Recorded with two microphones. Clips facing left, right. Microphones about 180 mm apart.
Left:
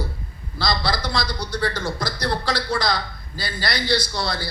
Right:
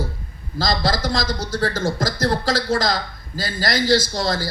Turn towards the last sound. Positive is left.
turn(degrees=-40)  # may be behind; listen again after turning